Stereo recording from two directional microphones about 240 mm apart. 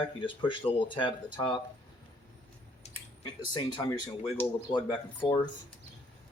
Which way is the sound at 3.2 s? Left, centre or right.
Centre.